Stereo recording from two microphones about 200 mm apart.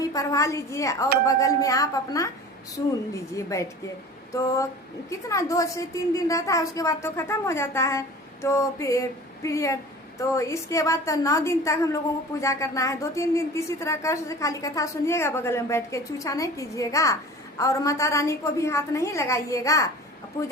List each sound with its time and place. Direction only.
0.0 s a woman's voice: 15° left (ahead or behind)